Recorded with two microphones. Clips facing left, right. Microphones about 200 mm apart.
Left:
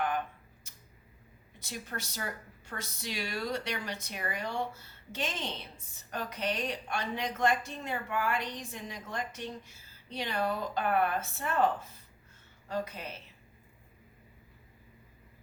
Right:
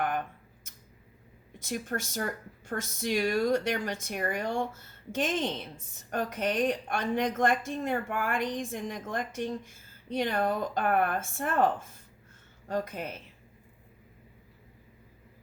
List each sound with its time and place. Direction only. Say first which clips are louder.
1.5 s speech: right 7 dB; 50° right (ahead or behind)